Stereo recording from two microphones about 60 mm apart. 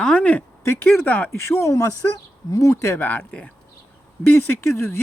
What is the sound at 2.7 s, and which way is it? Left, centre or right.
Speech, left.